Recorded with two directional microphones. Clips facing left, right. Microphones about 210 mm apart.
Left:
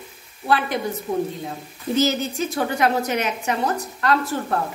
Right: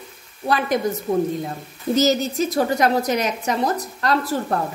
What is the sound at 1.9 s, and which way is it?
A woman's voice, 40° right (ahead or behind).